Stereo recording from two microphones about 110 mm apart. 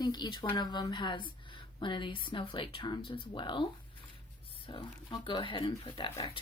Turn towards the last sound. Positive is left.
turn(degrees=45)  # may be behind; listen again after turning